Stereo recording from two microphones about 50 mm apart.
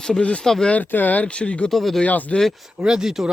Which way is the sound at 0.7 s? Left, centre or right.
Left.